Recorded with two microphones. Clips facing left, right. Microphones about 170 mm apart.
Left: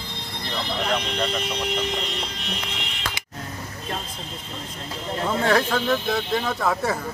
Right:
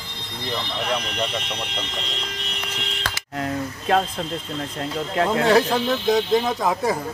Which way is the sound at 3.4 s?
90° right.